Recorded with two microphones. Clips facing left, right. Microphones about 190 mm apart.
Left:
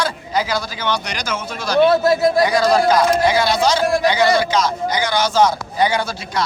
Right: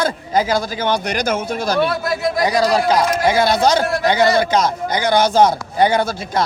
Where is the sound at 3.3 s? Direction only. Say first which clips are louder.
Right 2 dB; 50° right (ahead or behind).